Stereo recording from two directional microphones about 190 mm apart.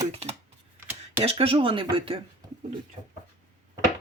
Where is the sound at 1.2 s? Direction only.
30° right (ahead or behind).